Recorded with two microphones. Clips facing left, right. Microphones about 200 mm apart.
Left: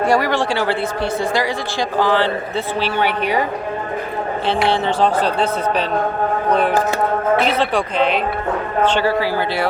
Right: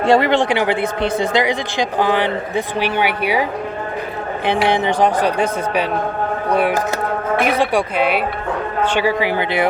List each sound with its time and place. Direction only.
0.0 s a man's voice: 25° right (ahead or behind)
4.4 s a man's voice: 15° right (ahead or behind)